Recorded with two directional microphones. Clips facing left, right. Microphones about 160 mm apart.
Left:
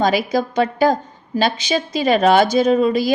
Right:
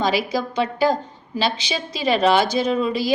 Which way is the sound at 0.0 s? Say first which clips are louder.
Left 4 dB; 50° left (ahead or behind).